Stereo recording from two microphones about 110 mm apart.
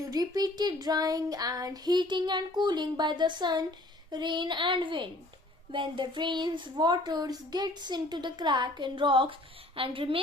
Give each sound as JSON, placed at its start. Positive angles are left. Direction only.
{"t": 0.0, "sound": "child singing", "side_deg": -35}